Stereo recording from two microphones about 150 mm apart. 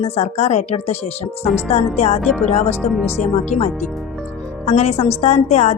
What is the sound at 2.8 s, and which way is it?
Speech, centre (ahead or behind).